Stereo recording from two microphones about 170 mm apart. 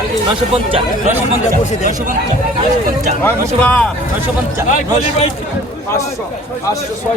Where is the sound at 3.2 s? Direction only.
10° left (ahead or behind).